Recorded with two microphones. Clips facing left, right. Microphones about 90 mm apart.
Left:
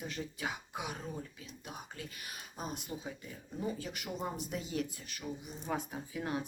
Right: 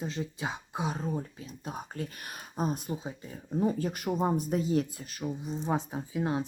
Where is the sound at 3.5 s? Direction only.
45° right (ahead or behind).